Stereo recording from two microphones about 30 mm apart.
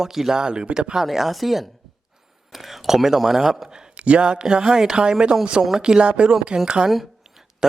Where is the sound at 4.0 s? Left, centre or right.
Right.